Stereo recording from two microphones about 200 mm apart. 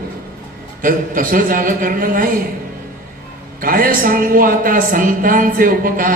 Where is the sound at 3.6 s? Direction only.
45° right (ahead or behind).